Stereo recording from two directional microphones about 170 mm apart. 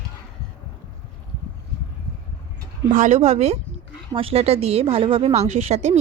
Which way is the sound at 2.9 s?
45° right (ahead or behind).